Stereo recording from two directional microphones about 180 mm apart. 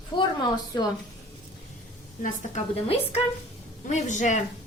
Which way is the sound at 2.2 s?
35° left (ahead or behind).